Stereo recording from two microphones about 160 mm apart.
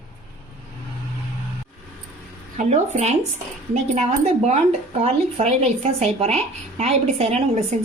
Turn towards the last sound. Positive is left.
turn(degrees=-40)  # may be behind; listen again after turning